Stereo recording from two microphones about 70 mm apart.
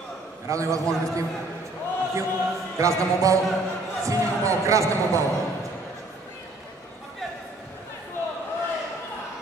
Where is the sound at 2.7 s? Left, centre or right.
Right.